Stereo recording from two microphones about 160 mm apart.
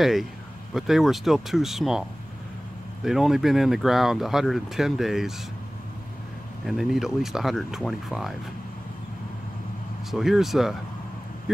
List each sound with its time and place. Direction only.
0.0 s speech: centre (ahead or behind)
6.6 s speech: centre (ahead or behind)
10.1 s speech: centre (ahead or behind)